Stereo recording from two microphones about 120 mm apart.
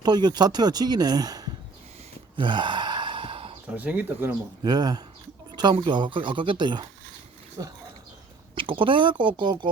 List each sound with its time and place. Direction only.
0.0 s speech: 35° right (ahead or behind)
2.3 s gasp: 40° right (ahead or behind)
3.8 s speech: 15° right (ahead or behind)
4.6 s speech: 35° right (ahead or behind)
7.6 s speech: 30° right (ahead or behind)
8.5 s speech: 45° right (ahead or behind)